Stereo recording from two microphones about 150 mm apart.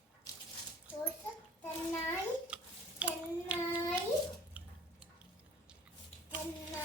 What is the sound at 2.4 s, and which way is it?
Child singing, 10° right (ahead or behind).